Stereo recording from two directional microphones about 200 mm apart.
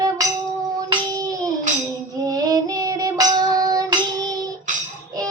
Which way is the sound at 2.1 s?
20° right (ahead or behind).